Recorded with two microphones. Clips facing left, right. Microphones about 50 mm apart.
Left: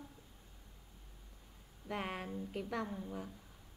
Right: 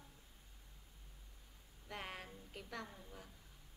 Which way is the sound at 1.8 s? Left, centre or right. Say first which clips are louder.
Left 8 dB; left.